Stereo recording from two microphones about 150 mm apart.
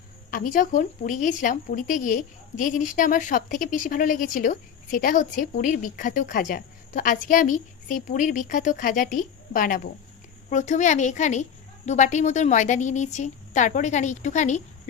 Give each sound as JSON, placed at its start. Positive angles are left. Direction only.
{"t": 0.3, "sound": "speech", "side_deg": 65}
{"t": 10.5, "sound": "a woman's voice", "side_deg": 55}